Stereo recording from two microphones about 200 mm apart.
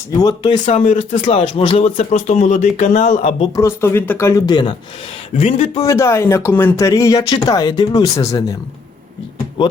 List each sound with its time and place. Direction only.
0.2 s speech: 20° left (ahead or behind)
0.5 s speech: 35° left (ahead or behind)
3.5 s speech: 15° left (ahead or behind)
5.3 s speech: 35° left (ahead or behind)
5.7 s speech: 15° left (ahead or behind)